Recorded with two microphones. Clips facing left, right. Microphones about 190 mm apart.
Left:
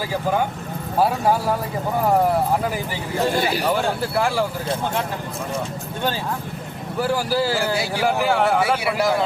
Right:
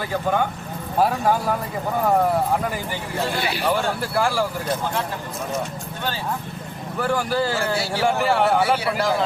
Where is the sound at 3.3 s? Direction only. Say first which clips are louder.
Left 4 dB; 40° left (ahead or behind).